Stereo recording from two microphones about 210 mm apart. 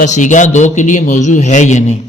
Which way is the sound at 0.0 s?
35° left (ahead or behind).